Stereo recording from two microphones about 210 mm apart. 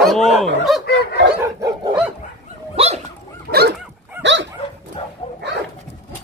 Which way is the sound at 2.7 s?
30° right (ahead or behind).